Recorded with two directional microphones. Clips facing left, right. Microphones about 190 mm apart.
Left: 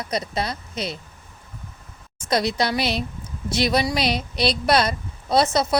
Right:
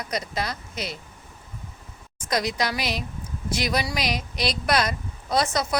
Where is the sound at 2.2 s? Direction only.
30° left (ahead or behind).